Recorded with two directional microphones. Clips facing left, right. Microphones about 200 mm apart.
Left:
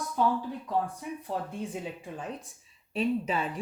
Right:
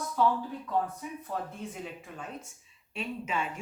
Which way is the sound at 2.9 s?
35° left (ahead or behind).